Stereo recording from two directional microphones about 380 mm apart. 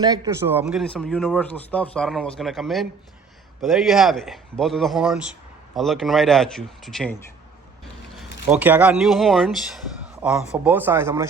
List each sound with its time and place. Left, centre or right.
0.0 s speech: centre